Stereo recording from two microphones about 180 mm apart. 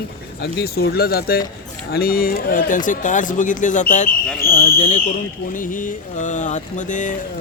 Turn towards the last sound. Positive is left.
turn(degrees=45)  # may be behind; listen again after turning